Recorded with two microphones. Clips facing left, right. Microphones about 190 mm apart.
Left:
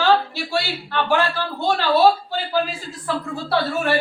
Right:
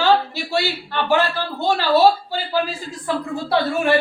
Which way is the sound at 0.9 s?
10° right (ahead or behind).